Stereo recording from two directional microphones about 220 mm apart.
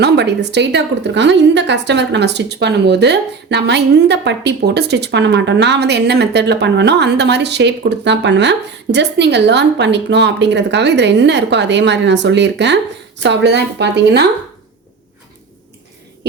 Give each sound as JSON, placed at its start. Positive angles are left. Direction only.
{"t": 0.0, "sound": "a woman's voice", "side_deg": -50}